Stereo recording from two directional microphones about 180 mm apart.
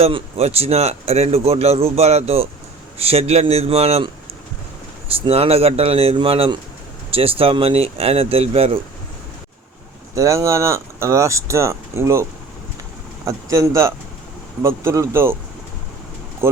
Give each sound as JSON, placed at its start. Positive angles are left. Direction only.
{"t": 0.0, "sound": "speech", "side_deg": -35}
{"t": 5.2, "sound": "speech", "side_deg": -35}
{"t": 10.2, "sound": "speech", "side_deg": -15}
{"t": 13.2, "sound": "speech", "side_deg": -20}
{"t": 16.4, "sound": "speech", "side_deg": -15}